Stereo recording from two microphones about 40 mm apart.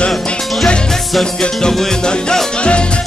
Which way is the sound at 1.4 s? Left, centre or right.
Centre.